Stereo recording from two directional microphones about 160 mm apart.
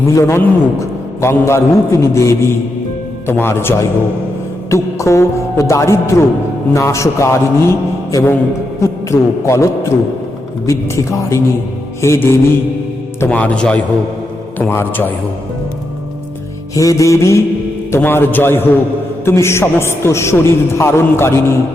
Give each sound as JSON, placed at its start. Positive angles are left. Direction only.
{"t": 0.1, "sound": "a man's voice", "side_deg": 15}
{"t": 10.7, "sound": "music", "side_deg": 20}
{"t": 12.0, "sound": "a man's voice", "side_deg": 15}
{"t": 16.7, "sound": "music", "side_deg": 20}
{"t": 17.9, "sound": "a man's voice", "side_deg": 15}